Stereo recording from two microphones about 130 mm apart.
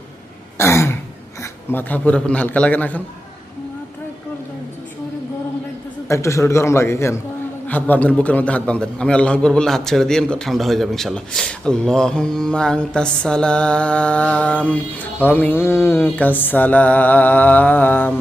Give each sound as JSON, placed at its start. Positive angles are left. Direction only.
{"t": 0.5, "sound": "throat clearing", "side_deg": 20}
{"t": 1.4, "sound": "a man's voice", "side_deg": 15}
{"t": 6.1, "sound": "a man's voice", "side_deg": 20}